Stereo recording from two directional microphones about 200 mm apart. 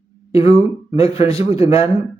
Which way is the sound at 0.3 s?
30° left (ahead or behind).